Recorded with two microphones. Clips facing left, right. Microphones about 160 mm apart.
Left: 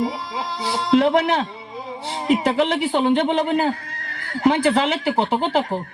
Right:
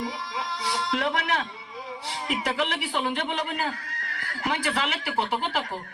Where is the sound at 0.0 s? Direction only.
25° left (ahead or behind).